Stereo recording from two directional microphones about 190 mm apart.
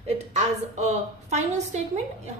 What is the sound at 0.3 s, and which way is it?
A woman's voice, 35° right (ahead or behind).